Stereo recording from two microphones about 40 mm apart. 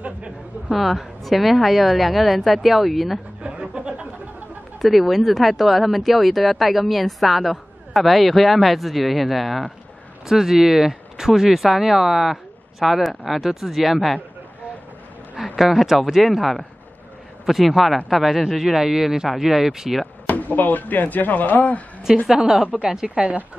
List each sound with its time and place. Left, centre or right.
0.7 s speech: centre
3.4 s a sound: right
4.8 s speech: centre
10.2 s speech: centre
15.4 s a man's voice: centre
20.2 s speech: left
22.3 s a man's voice: centre